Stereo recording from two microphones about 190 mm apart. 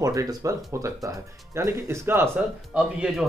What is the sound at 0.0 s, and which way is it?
Speech, 20° right (ahead or behind).